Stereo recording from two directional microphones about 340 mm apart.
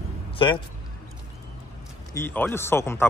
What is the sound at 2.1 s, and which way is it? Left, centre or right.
Speech, centre.